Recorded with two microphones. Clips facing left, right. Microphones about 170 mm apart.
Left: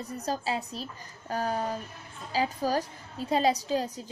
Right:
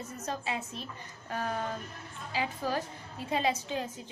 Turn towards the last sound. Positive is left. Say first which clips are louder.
# left 6 dB
turn(degrees=40)  # may be behind; listen again after turning